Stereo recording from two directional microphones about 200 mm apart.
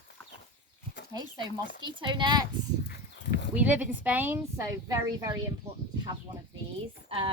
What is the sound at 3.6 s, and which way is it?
A woman's voice, 10° right (ahead or behind).